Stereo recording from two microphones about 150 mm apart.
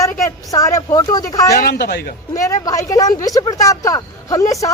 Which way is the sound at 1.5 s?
90° left.